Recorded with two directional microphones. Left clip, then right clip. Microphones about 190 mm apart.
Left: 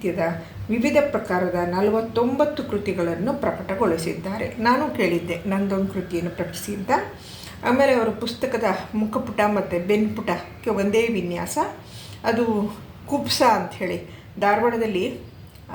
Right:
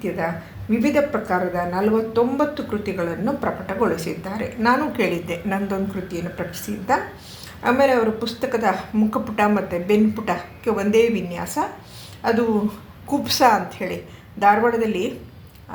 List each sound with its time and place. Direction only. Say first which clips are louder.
0.8 s speech: even; 15° right (ahead or behind)